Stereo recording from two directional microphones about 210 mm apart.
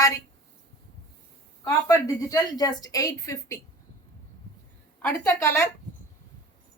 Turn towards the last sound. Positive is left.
turn(degrees=10)  # may be behind; listen again after turning